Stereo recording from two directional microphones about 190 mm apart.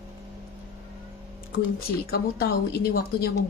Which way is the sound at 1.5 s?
50° left (ahead or behind).